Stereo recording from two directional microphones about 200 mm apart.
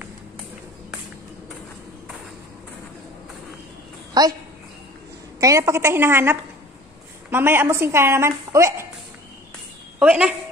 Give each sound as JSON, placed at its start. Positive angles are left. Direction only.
{"t": 4.1, "sound": "a sound", "side_deg": -20}
{"t": 5.4, "sound": "speech", "side_deg": -15}
{"t": 9.9, "sound": "a woman's voice", "side_deg": -5}